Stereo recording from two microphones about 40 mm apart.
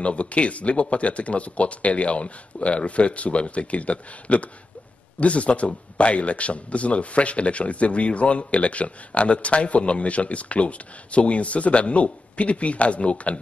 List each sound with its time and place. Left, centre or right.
0.0 s speech: left